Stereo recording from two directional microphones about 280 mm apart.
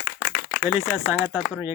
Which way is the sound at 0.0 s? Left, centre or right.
Left.